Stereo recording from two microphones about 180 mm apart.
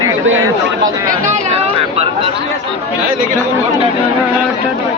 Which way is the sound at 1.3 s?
35° right (ahead or behind).